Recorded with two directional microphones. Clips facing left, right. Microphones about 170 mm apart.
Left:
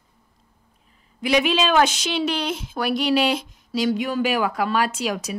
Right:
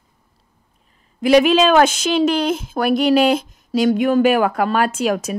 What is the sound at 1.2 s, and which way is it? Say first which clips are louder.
A woman's voice: right 8 dB; 45° right (ahead or behind).